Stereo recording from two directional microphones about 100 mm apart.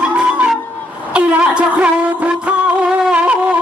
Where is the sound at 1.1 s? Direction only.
10° right (ahead or behind).